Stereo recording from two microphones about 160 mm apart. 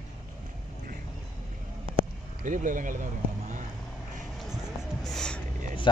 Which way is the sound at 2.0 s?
55° right (ahead or behind).